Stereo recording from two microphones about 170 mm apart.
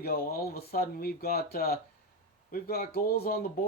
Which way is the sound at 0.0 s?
65° left (ahead or behind).